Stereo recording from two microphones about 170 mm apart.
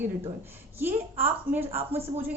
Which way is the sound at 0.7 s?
10° right (ahead or behind).